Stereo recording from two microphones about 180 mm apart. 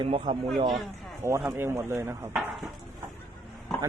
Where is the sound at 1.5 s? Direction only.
15° right (ahead or behind).